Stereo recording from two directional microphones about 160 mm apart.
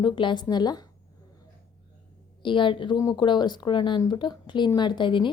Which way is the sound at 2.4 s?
30° left (ahead or behind).